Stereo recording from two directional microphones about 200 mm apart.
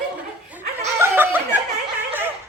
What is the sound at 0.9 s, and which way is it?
Snicker, 10° right (ahead or behind).